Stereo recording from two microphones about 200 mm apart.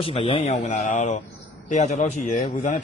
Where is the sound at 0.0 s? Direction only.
30° left (ahead or behind).